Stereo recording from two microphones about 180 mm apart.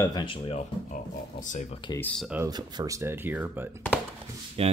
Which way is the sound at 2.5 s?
20° right (ahead or behind).